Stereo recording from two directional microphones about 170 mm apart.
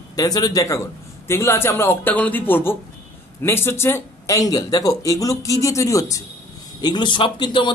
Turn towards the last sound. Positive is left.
turn(degrees=25)  # may be behind; listen again after turning